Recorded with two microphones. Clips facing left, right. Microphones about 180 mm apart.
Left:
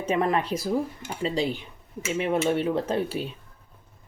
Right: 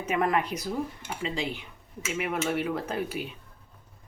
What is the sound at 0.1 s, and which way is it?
Speech, 30° left (ahead or behind).